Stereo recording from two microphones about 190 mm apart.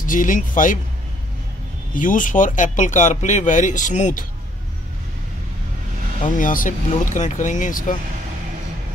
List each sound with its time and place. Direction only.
0.0 s speech: 45° left (ahead or behind)
2.0 s speech: 45° left (ahead or behind)
6.2 s speech: 45° left (ahead or behind)